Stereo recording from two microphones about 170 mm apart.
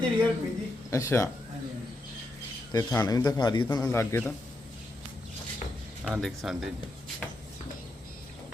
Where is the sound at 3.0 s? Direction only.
20° left (ahead or behind).